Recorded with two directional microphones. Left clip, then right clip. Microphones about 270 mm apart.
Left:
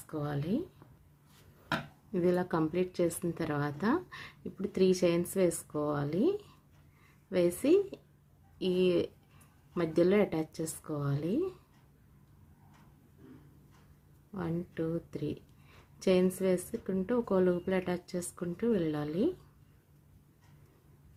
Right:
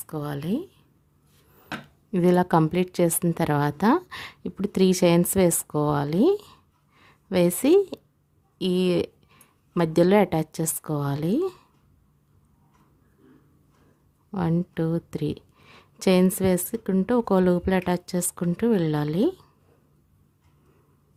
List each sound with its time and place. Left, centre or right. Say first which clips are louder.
0.1 s speech: right 6 dB; right
2.1 s speech: right 10 dB; right
14.3 s speech: right 9 dB; right